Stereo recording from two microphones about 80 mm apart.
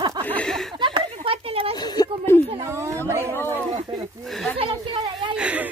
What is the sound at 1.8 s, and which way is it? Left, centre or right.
Speech, left.